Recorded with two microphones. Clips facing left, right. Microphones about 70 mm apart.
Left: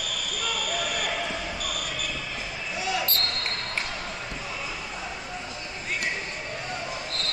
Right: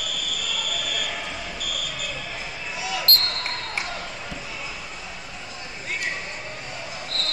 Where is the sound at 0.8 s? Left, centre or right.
Left.